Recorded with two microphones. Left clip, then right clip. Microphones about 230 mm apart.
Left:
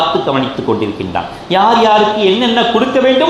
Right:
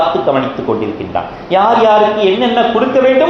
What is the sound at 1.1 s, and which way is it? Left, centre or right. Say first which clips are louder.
A man's voice: right 1 dB; left.